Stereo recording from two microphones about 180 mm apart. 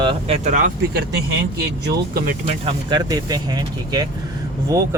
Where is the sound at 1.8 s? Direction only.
60° right (ahead or behind).